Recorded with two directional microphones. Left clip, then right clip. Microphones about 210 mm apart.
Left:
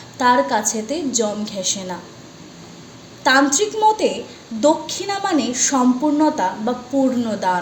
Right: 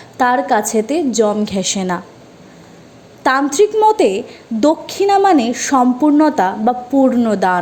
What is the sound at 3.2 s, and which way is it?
A woman's voice, 40° right (ahead or behind).